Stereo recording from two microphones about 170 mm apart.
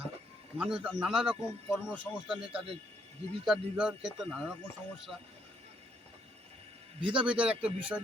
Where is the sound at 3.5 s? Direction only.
5° right (ahead or behind).